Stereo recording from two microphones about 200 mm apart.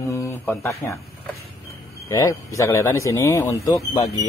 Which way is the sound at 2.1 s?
15° left (ahead or behind).